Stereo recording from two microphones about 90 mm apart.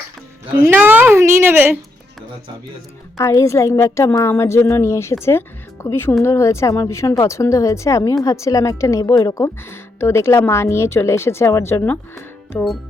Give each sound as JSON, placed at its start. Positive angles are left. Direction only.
{"t": 0.7, "sound": "speech", "side_deg": -20}
{"t": 3.2, "sound": "speech", "side_deg": 40}
{"t": 9.6, "sound": "speech", "side_deg": 30}